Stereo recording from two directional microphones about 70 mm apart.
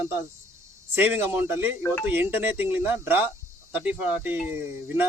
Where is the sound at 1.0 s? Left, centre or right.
Right.